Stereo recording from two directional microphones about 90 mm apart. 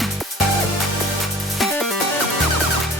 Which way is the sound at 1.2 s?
Centre (ahead or behind).